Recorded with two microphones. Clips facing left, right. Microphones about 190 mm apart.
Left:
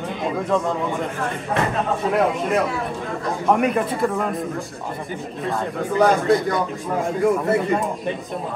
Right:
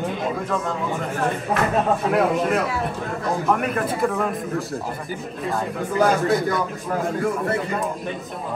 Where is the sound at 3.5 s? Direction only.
Centre (ahead or behind).